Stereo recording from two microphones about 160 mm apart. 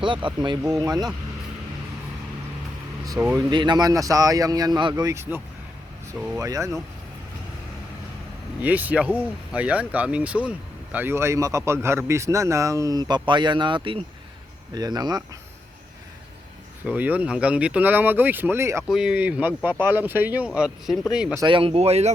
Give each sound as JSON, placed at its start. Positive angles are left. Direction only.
{"t": 0.0, "sound": "speech", "side_deg": -30}
{"t": 3.3, "sound": "speech", "side_deg": -30}
{"t": 6.4, "sound": "speech", "side_deg": -20}
{"t": 8.6, "sound": "speech", "side_deg": -10}
{"t": 16.8, "sound": "speech", "side_deg": -10}
{"t": 18.9, "sound": "speech", "side_deg": -5}
{"t": 21.4, "sound": "speech", "side_deg": -35}